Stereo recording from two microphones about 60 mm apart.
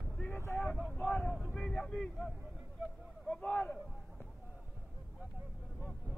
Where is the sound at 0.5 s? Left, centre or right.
Left.